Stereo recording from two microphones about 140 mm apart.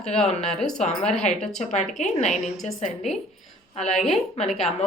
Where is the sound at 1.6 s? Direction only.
55° left (ahead or behind).